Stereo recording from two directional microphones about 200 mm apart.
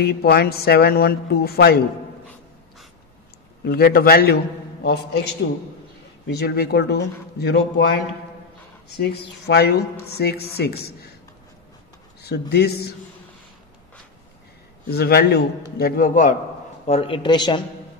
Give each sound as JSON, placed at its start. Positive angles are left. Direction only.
{"t": 0.0, "sound": "a woman's voice", "side_deg": 50}
{"t": 3.6, "sound": "a woman's voice", "side_deg": 50}
{"t": 12.2, "sound": "a woman's voice", "side_deg": 55}
{"t": 14.9, "sound": "a woman's voice", "side_deg": 55}
{"t": 16.8, "sound": "a man's voice", "side_deg": 30}